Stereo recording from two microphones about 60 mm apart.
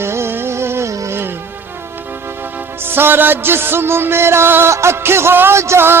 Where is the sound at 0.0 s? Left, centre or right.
Right.